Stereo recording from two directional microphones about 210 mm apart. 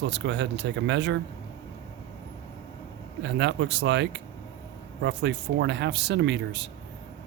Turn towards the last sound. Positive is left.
turn(degrees=-55)  # may be behind; listen again after turning